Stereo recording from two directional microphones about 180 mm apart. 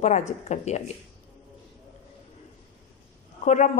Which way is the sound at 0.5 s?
40° left (ahead or behind).